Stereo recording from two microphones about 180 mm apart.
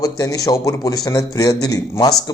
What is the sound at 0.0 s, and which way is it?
A man's voice, 20° left (ahead or behind).